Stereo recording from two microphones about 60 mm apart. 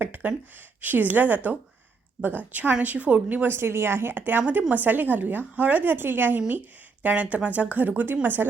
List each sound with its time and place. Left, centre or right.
0.0 s a sound: right
0.8 s a woman's voice: right
2.5 s a woman's voice: right